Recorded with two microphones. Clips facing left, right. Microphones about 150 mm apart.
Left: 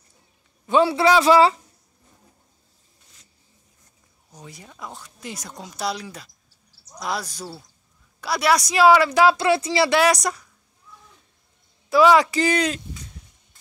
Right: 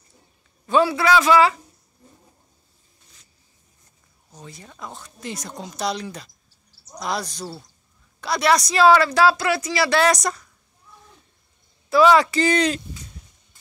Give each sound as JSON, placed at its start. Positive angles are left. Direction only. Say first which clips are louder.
{"t": 0.7, "sound": "a man's voice", "louder": "left 1 dB", "side_deg": 25}
{"t": 4.3, "sound": "speech", "louder": "right 1 dB", "side_deg": 15}
{"t": 9.9, "sound": "speech", "louder": "even", "side_deg": 10}
{"t": 11.9, "sound": "speech", "louder": "even", "side_deg": 15}